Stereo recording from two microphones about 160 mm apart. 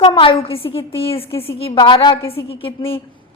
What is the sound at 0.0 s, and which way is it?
A woman's voice, 35° left (ahead or behind).